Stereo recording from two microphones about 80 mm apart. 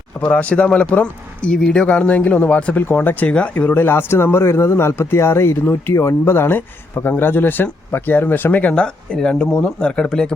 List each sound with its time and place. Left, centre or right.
0.2 s speech: centre